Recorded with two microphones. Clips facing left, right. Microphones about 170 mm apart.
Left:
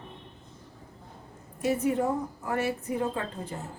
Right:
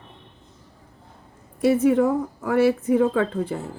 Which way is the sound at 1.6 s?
85° right.